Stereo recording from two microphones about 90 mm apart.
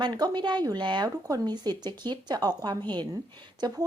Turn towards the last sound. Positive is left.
turn(degrees=-45)  # may be behind; listen again after turning